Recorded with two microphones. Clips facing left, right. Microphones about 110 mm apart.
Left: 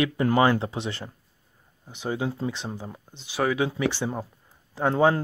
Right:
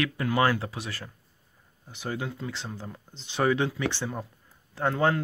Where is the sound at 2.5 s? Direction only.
15° left (ahead or behind).